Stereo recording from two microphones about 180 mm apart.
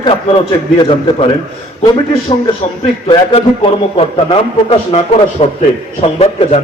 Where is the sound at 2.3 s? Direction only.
30° left (ahead or behind).